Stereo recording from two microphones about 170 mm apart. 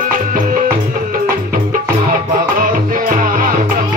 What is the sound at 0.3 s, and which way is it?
Music, 55° right (ahead or behind).